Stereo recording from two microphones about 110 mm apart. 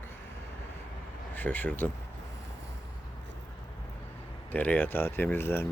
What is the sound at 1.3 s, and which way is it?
Speech, 15° left (ahead or behind).